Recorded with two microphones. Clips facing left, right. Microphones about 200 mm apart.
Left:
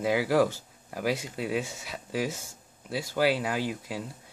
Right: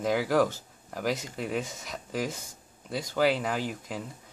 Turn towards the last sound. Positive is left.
turn(degrees=10)  # may be behind; listen again after turning